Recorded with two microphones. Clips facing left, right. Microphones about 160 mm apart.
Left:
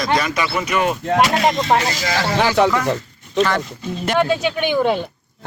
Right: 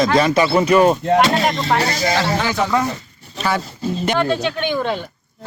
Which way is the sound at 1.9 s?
65° left (ahead or behind).